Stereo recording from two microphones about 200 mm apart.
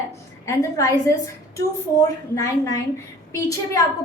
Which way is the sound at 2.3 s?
15° left (ahead or behind).